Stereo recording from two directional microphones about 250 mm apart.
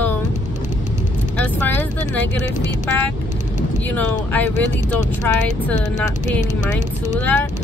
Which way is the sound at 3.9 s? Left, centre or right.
Centre.